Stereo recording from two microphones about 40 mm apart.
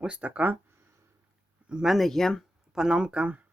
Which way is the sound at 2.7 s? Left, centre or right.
Centre.